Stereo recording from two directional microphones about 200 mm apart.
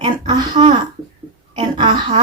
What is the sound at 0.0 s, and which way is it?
Speech, 25° right (ahead or behind).